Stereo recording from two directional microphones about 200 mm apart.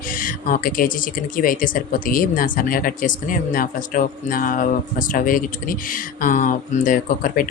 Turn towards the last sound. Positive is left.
turn(degrees=45)  # may be behind; listen again after turning